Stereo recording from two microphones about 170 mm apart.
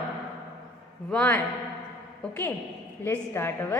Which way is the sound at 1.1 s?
10° left (ahead or behind).